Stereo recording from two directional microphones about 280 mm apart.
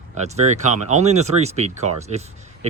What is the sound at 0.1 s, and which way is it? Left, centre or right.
Speech, right.